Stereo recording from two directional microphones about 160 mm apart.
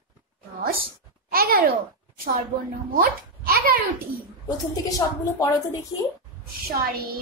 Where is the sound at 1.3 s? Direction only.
70° right (ahead or behind).